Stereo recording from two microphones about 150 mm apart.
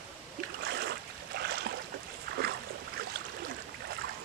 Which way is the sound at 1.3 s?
90° right.